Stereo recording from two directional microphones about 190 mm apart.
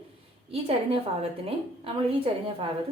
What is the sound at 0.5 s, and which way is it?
A woman's voice, 30° right (ahead or behind).